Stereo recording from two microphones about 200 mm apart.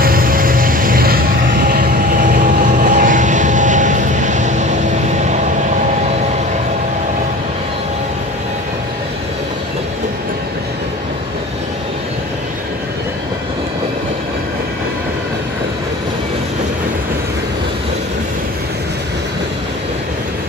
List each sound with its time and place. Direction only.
0.0 s vehicle: 45° right (ahead or behind)